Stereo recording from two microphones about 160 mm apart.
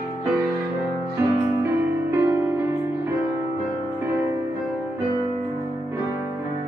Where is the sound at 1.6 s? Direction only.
15° right (ahead or behind).